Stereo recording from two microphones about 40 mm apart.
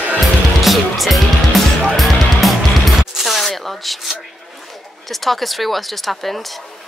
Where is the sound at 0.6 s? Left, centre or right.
Centre.